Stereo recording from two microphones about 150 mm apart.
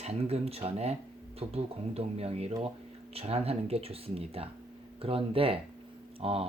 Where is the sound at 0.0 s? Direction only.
45° right (ahead or behind).